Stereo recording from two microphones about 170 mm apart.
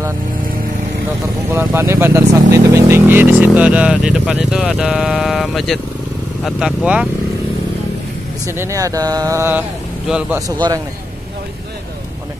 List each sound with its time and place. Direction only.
1.5 s speech: 15° right (ahead or behind)
8.5 s speech: 15° right (ahead or behind)
10.0 s speech: 5° right (ahead or behind)